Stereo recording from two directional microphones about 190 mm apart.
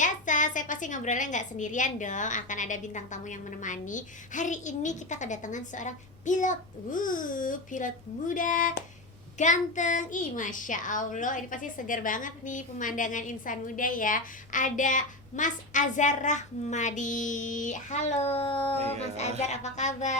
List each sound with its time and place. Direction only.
0.0 s a child's voice: 40° left (ahead or behind)